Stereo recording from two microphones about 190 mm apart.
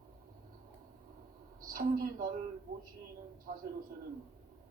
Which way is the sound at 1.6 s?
50° right (ahead or behind).